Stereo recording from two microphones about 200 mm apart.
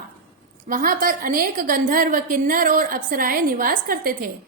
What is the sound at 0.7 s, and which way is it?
A woman's voice, 45° right (ahead or behind).